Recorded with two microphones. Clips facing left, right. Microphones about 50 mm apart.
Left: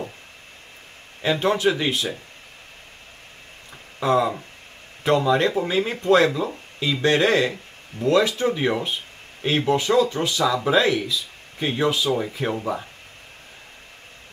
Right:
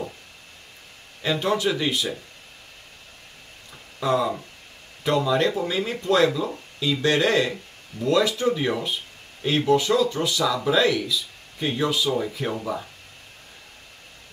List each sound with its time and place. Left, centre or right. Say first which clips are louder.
1.2 s speech: left 3 dB; left
4.0 s speech: left 2 dB; left